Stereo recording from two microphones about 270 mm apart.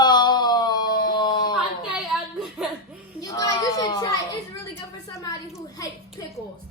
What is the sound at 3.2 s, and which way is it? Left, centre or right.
Speech, centre.